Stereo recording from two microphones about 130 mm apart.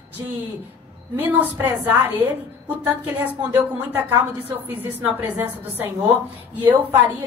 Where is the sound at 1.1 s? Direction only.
15° right (ahead or behind).